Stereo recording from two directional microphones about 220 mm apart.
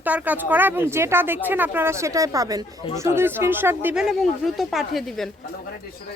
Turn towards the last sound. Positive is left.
turn(degrees=0)  # may be behind; listen again after turning